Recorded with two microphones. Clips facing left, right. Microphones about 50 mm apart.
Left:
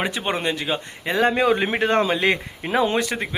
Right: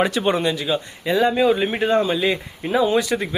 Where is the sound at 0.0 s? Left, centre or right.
Centre.